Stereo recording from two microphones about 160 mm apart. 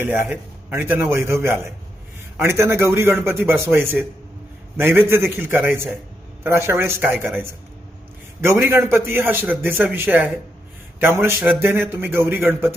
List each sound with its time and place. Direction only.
0.0 s a man's voice: 15° right (ahead or behind)
8.4 s a man's voice: 15° right (ahead or behind)